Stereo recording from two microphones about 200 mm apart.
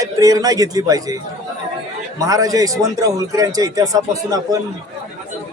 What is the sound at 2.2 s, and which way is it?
A man's voice, 15° right (ahead or behind).